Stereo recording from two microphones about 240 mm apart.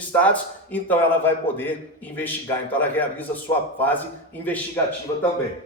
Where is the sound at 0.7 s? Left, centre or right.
Centre.